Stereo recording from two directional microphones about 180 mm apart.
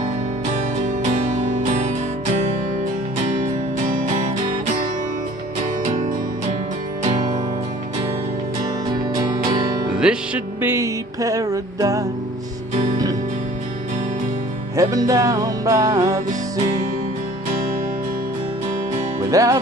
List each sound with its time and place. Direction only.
3.8 s music: 45° right (ahead or behind)
8.9 s music: 20° right (ahead or behind)
9.9 s music: 5° right (ahead or behind)
14.8 s music: 20° right (ahead or behind)
19.3 s music: 20° right (ahead or behind)